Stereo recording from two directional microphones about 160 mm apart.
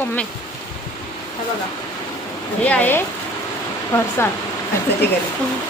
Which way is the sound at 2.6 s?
10° left (ahead or behind).